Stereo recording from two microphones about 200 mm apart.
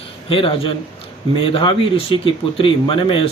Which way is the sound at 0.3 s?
25° left (ahead or behind).